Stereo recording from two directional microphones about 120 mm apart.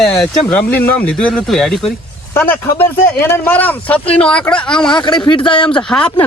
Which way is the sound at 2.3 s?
20° left (ahead or behind).